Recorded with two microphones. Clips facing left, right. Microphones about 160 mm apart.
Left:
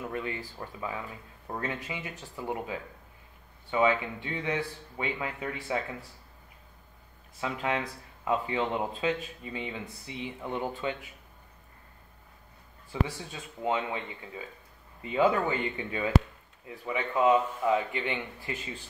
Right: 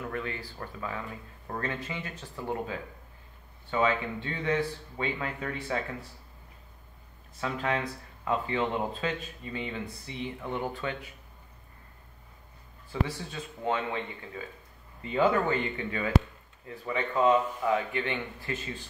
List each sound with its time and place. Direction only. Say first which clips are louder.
0.0 s speech: even; 20° left (ahead or behind)
7.3 s speech: even; 15° left (ahead or behind)
12.9 s speech: even; 15° left (ahead or behind)
15.0 s speech: even; 15° left (ahead or behind)